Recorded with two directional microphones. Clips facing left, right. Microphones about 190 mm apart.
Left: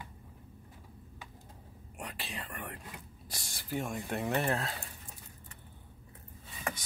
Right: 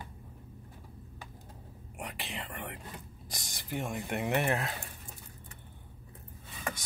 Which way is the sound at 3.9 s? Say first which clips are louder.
Right 3 dB; 15° right (ahead or behind).